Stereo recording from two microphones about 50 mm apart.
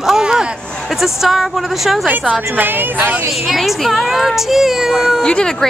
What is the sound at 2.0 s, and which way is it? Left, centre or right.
Speech, right.